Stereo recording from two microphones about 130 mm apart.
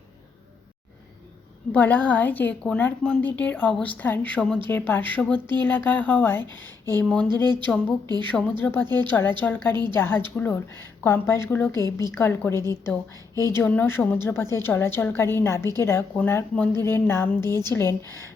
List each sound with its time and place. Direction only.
1.7 s a woman's voice: 15° left (ahead or behind)
8.0 s a woman's voice: 30° right (ahead or behind)
8.3 s a woman's voice: 10° left (ahead or behind)
13.3 s speech: 30° right (ahead or behind)
13.6 s a woman's voice: 15° left (ahead or behind)